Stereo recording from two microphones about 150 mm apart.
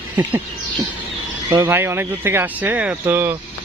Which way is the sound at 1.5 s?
15° right (ahead or behind).